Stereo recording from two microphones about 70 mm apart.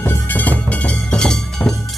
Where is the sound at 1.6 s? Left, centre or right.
Left.